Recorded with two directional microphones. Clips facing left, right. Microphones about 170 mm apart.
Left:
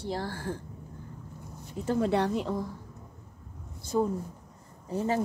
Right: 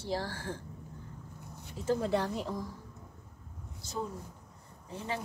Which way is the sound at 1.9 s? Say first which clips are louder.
Left 4 dB; 65° left (ahead or behind).